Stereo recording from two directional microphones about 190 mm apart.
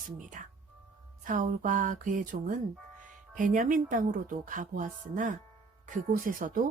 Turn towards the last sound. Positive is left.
turn(degrees=-45)  # may be behind; listen again after turning